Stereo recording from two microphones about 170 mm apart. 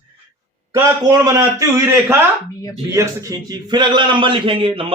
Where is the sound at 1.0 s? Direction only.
25° right (ahead or behind).